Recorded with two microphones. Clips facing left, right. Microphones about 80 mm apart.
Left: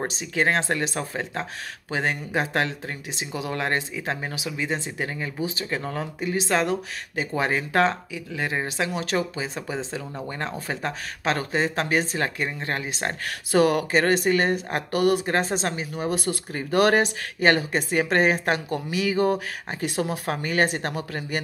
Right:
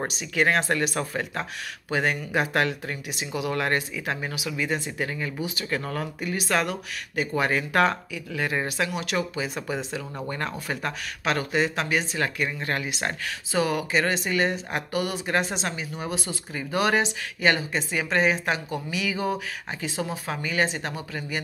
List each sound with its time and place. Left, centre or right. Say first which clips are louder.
0.1 s speech: right 2 dB; left
13.5 s speech: left 5 dB; left